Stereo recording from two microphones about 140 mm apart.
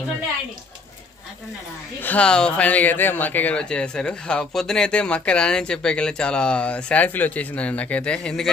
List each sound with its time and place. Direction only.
2.0 s speech: 10° left (ahead or behind)